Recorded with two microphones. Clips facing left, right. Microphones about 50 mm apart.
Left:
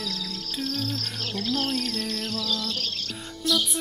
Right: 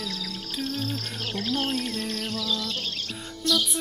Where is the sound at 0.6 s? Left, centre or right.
Right.